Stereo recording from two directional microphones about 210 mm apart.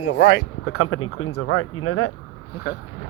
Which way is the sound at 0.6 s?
90° left.